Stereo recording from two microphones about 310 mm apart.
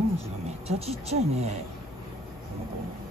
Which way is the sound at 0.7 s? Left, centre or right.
Centre.